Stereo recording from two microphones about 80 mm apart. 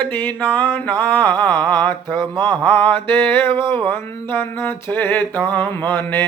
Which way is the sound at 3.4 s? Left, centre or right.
Right.